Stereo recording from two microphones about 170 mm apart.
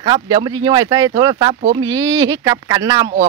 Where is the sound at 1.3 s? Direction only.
30° right (ahead or behind).